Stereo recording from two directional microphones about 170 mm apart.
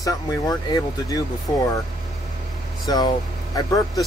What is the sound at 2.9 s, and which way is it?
Speech, 20° left (ahead or behind).